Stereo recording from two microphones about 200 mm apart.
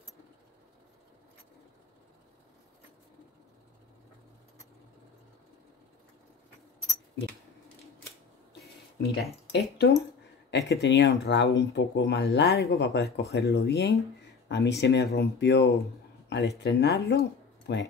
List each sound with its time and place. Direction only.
8.9 s speech: 55° left (ahead or behind)